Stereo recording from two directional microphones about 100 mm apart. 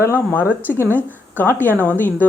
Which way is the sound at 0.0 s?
25° left (ahead or behind).